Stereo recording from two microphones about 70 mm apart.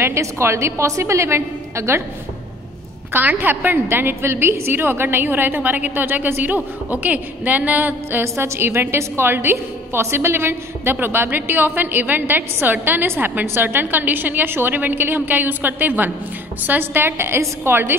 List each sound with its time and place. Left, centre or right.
0.0 s a woman's voice: right
3.1 s a woman's voice: right
8.2 s a woman's voice: right